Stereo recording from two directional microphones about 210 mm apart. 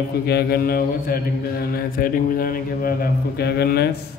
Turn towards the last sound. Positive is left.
turn(degrees=50)  # may be behind; listen again after turning